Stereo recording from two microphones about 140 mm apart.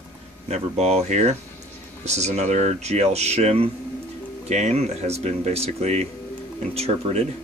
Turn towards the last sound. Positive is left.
turn(degrees=-50)  # may be behind; listen again after turning